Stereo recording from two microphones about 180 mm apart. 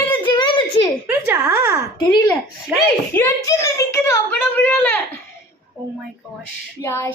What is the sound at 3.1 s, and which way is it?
A woman's voice, 15° left (ahead or behind).